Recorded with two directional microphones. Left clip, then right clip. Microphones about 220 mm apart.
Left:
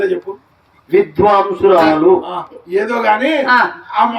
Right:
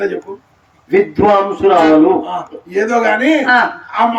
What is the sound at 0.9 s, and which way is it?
Music, 50° right (ahead or behind).